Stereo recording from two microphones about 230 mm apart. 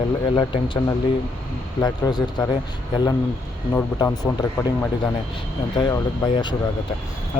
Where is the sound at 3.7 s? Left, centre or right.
Centre.